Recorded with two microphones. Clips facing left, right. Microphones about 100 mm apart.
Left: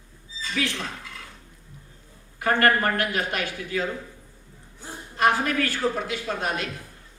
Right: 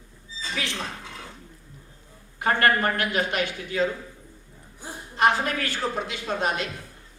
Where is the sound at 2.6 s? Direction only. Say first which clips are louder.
Left 1 dB; 20° right (ahead or behind).